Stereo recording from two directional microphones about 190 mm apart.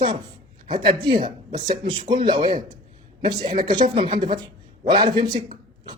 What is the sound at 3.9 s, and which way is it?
Speech, 30° right (ahead or behind).